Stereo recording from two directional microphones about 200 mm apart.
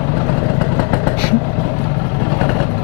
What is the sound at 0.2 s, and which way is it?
Vehicle, 20° left (ahead or behind).